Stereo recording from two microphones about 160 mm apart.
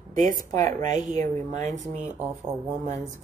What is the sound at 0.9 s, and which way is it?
Speech, 45° right (ahead or behind).